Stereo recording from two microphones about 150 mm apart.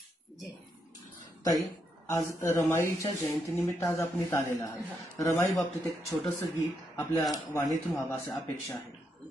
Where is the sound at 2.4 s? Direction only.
20° left (ahead or behind).